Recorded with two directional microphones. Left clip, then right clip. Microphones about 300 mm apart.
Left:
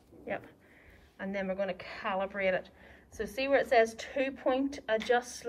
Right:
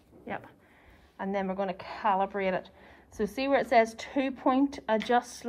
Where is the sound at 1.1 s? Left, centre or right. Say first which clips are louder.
Right 3 dB; centre.